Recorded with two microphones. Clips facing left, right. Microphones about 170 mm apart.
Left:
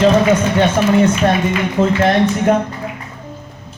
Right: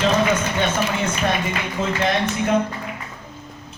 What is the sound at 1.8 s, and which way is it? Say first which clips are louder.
Speech: left 10 dB; 40° left (ahead or behind).